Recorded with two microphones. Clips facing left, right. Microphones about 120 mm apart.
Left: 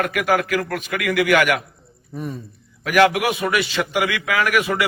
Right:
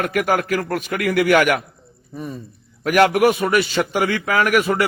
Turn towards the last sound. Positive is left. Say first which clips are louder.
# right 2 dB
turn(degrees=-40)  # may be behind; listen again after turning